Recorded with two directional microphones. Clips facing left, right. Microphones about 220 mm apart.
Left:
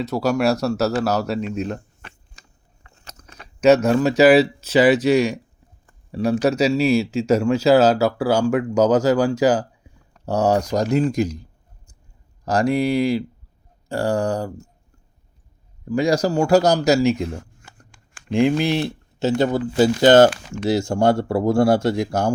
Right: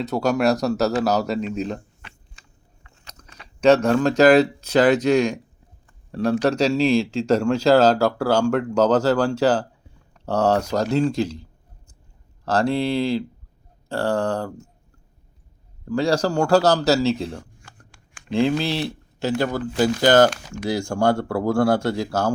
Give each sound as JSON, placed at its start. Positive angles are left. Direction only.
{"t": 0.0, "sound": "speech", "side_deg": 0}
{"t": 2.0, "sound": "a sound", "side_deg": 45}
{"t": 2.8, "sound": "biting", "side_deg": 35}
{"t": 3.6, "sound": "speech", "side_deg": 5}
{"t": 12.5, "sound": "speech", "side_deg": 15}
{"t": 15.9, "sound": "speech", "side_deg": 10}